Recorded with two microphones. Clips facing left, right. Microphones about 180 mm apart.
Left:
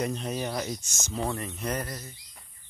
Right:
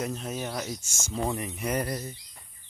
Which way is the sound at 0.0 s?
Centre (ahead or behind).